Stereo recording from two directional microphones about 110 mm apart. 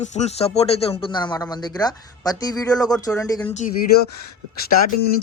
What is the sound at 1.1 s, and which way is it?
Speech, 40° left (ahead or behind).